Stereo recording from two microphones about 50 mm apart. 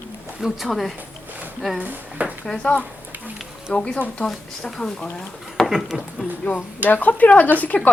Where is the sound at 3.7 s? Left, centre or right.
Centre.